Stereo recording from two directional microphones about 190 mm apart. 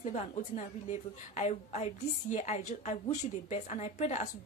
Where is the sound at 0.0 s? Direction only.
35° left (ahead or behind).